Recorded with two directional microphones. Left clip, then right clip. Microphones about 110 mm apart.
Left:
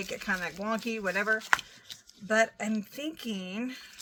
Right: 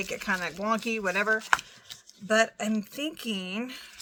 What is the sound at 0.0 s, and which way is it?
Speech, 30° right (ahead or behind).